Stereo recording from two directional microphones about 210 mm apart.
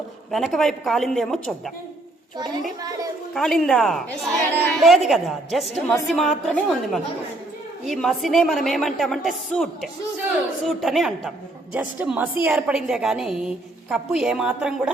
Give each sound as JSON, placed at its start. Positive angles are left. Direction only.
{"t": 0.3, "sound": "a woman's voice", "side_deg": 0}
{"t": 3.3, "sound": "a woman's voice", "side_deg": 5}